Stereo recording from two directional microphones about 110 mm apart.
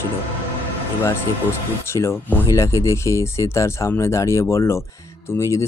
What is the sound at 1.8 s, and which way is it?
Speech, 25° left (ahead or behind).